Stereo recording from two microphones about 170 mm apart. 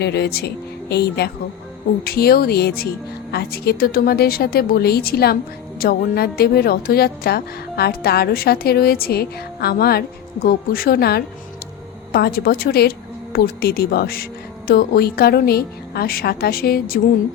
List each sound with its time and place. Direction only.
0.0 s a woman's voice: 75° left (ahead or behind); by 17.0 s 60° left (ahead or behind)